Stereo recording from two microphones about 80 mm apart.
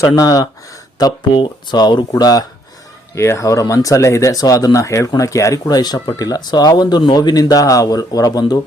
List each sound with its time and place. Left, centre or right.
0.2 s speech: left
1.3 s speech: left
3.2 s speech: left
5.7 s speech: left